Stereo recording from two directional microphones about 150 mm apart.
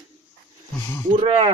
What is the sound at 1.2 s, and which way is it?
Speech, 40° right (ahead or behind).